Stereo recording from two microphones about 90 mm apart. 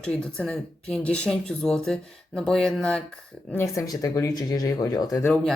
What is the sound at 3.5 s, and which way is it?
Speech, 35° left (ahead or behind).